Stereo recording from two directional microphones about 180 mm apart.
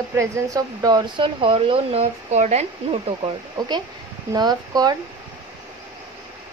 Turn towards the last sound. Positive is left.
turn(degrees=-20)  # may be behind; listen again after turning